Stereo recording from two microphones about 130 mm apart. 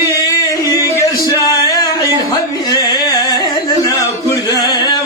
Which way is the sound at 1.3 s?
25° left (ahead or behind).